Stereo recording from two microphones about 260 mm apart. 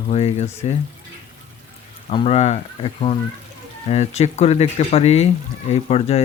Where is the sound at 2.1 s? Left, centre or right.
Left.